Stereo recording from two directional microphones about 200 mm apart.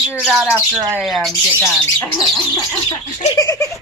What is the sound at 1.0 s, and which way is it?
Speech, centre (ahead or behind).